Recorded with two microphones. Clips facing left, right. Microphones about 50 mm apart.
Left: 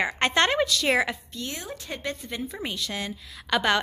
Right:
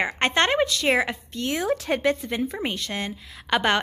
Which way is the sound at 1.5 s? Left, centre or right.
Right.